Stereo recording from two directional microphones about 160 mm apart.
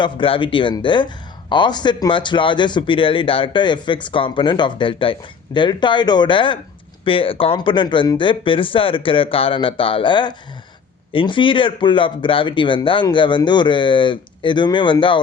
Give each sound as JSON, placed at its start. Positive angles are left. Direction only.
{"t": 0.0, "sound": "speech", "side_deg": 30}